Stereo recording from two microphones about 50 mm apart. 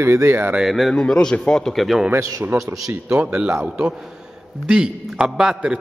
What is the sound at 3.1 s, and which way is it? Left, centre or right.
A man's voice, centre.